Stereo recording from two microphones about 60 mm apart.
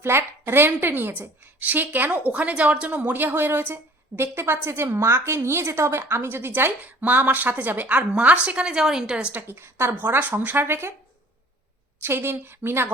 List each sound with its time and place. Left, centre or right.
0.0 s a woman's voice: right
8.6 s a woman's voice: centre
9.3 s a woman's voice: right
12.0 s a woman's voice: right